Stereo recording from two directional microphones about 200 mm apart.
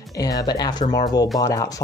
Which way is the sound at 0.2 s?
20° left (ahead or behind).